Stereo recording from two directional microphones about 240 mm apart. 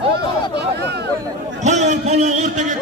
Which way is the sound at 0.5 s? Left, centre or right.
Right.